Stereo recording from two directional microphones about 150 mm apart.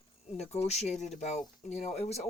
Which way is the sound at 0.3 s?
45° left (ahead or behind).